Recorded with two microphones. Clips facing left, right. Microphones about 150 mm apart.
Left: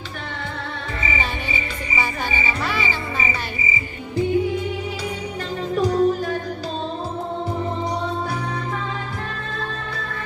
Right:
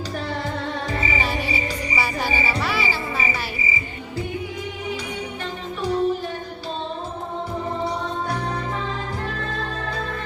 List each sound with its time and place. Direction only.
2.6 s music: 5° right (ahead or behind)
5.7 s music: 40° left (ahead or behind)